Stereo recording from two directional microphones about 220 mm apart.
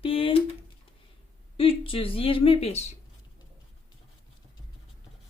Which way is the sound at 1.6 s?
25° left (ahead or behind).